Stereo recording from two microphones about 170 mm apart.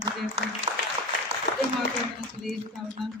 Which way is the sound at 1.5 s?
75° left (ahead or behind).